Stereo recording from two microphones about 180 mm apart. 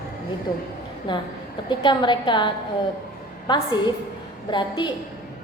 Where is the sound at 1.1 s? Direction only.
25° left (ahead or behind).